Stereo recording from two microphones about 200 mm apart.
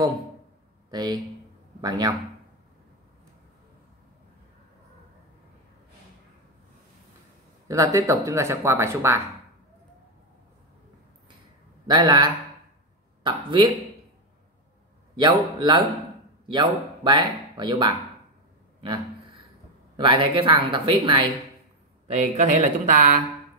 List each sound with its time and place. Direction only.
0.8 s speech: 20° right (ahead or behind)
7.6 s speech: 15° right (ahead or behind)
11.9 s speech: 20° right (ahead or behind)
15.1 s speech: 20° right (ahead or behind)
20.0 s speech: 25° right (ahead or behind)
22.1 s speech: 35° right (ahead or behind)